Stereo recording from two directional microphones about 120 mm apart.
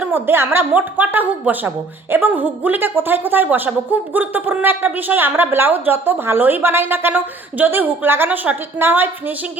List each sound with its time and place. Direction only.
0.0 s a woman's voice: 15° right (ahead or behind)